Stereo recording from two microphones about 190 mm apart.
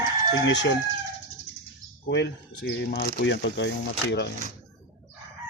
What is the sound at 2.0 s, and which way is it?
Speech, 60° left (ahead or behind).